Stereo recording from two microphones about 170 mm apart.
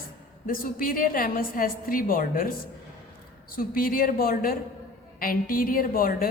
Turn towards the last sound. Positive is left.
turn(degrees=60)  # may be behind; listen again after turning